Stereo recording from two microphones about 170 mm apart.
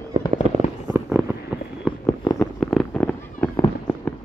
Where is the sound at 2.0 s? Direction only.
20° left (ahead or behind).